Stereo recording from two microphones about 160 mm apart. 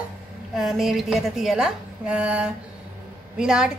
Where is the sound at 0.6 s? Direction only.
Centre (ahead or behind).